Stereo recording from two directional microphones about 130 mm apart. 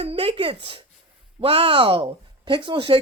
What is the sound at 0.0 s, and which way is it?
Speech, 50° right (ahead or behind).